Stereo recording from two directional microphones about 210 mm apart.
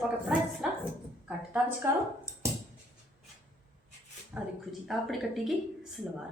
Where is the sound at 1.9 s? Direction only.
10° right (ahead or behind).